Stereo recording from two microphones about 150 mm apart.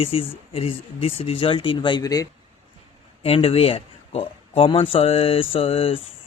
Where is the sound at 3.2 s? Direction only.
40° left (ahead or behind).